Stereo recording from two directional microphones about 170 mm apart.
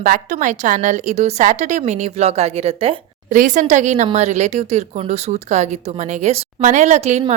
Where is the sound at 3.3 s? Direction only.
50° right (ahead or behind).